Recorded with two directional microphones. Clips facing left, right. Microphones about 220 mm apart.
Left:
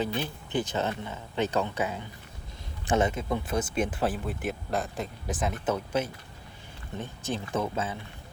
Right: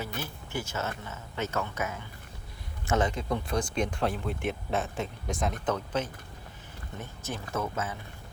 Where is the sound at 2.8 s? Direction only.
25° left (ahead or behind).